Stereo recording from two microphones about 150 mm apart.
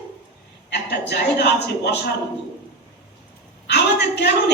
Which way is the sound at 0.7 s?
90° left.